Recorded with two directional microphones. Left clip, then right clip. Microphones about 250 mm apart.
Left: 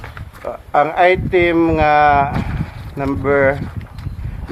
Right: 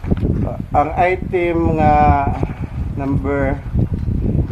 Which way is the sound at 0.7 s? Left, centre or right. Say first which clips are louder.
Left 3 dB; left.